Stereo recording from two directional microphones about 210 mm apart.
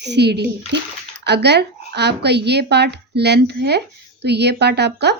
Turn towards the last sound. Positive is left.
turn(degrees=-50)  # may be behind; listen again after turning